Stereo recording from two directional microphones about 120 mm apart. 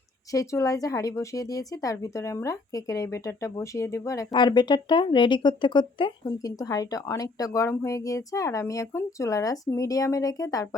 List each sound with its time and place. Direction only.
0.3 s a woman's voice: 30° left (ahead or behind)
4.4 s a woman's voice: 40° left (ahead or behind)